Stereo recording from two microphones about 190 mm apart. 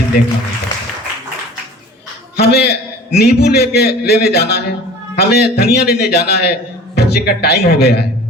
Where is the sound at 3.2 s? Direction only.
55° left (ahead or behind).